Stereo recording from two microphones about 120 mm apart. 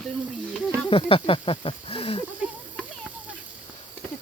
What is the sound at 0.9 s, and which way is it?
Speech, 50° left (ahead or behind).